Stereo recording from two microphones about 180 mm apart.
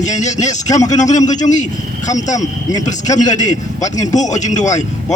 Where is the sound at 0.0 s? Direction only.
40° left (ahead or behind).